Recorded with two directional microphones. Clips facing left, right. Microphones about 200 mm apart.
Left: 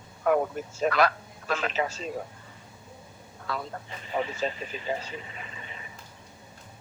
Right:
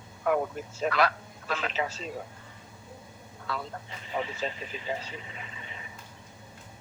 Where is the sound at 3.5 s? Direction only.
45° left (ahead or behind).